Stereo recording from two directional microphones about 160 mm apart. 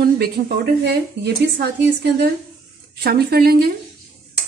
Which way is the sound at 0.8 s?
90° right.